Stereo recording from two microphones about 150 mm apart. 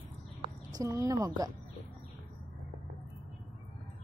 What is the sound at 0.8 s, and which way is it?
Speech, 20° right (ahead or behind).